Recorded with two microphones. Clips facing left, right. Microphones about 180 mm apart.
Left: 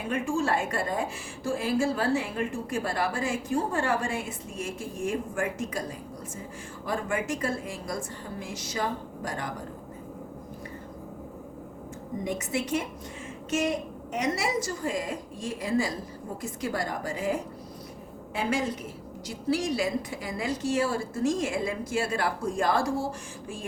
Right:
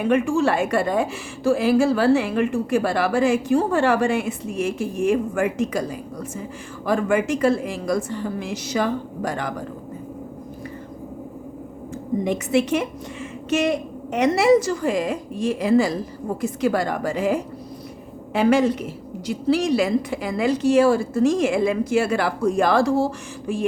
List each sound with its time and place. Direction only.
0.0 s a woman's voice: 80° right
6.8 s a woman's voice: 85° right
12.2 s a woman's voice: 75° right (ahead or behind)